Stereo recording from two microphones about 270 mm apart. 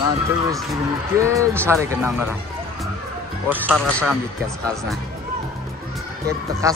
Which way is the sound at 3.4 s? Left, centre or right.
Centre.